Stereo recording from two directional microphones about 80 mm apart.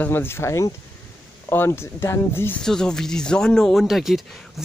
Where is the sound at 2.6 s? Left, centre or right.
Centre.